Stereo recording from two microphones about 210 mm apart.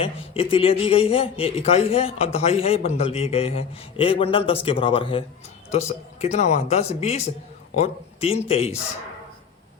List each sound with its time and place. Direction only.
0.0 s a man's voice: 25° left (ahead or behind)